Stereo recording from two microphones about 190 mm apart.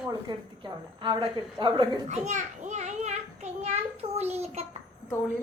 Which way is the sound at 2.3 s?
40° right (ahead or behind).